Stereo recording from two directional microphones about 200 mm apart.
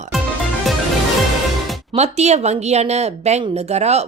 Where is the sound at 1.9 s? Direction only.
35° right (ahead or behind).